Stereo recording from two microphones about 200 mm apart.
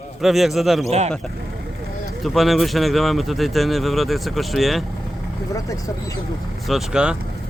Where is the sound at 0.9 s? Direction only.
30° right (ahead or behind).